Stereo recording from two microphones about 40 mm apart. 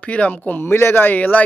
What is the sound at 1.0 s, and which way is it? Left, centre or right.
Speech, left.